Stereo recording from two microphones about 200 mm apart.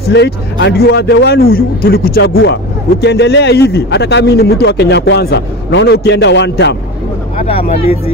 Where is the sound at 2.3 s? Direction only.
60° left (ahead or behind).